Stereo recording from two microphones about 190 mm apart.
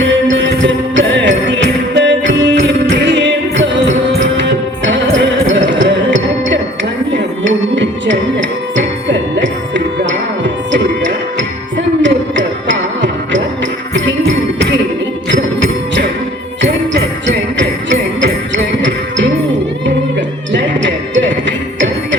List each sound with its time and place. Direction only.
0.0 s music: 75° right (ahead or behind)
13.9 s jingle bell: 70° right (ahead or behind)
16.6 s music: 70° right (ahead or behind)